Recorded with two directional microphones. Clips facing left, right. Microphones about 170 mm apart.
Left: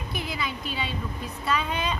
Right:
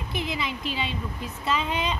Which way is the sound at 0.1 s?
25° right (ahead or behind).